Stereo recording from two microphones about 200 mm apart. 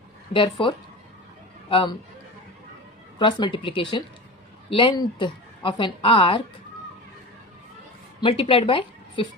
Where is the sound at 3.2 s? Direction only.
25° left (ahead or behind).